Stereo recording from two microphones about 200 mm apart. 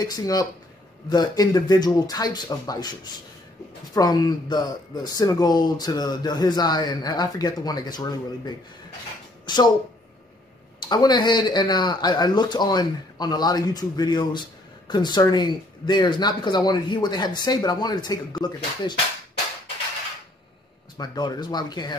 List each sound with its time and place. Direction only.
0.0 s speech: 20° left (ahead or behind)
10.8 s speech: 20° left (ahead or behind)
21.0 s speech: 20° left (ahead or behind)